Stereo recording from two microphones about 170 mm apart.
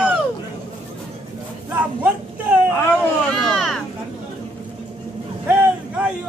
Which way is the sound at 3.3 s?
5° left (ahead or behind).